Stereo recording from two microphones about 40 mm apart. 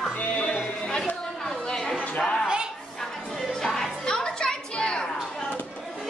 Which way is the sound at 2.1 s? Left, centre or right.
Left.